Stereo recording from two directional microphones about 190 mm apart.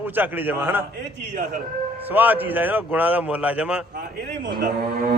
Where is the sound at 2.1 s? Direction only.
10° right (ahead or behind).